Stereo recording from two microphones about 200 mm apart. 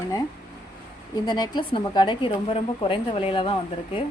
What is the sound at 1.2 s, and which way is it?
A woman's voice, 20° left (ahead or behind).